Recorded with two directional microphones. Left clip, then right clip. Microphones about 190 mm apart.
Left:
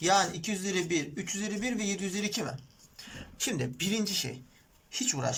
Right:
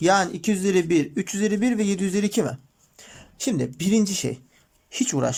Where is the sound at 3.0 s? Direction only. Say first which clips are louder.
Right 5 dB; 35° right (ahead or behind).